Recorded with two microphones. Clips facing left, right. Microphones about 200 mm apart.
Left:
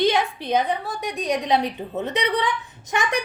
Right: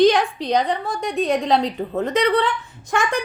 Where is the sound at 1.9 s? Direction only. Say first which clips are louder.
Right 6 dB; 15° left (ahead or behind).